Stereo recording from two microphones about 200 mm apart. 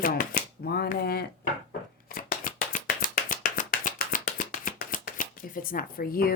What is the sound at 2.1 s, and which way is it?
Shuffling cards, 45° left (ahead or behind).